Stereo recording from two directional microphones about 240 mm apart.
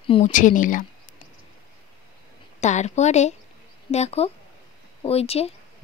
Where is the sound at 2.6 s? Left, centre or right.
Left.